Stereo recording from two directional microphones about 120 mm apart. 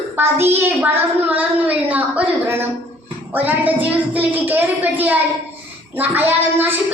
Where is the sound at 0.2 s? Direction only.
20° right (ahead or behind).